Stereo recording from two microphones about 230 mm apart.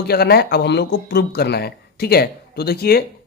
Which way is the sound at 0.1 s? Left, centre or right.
Left.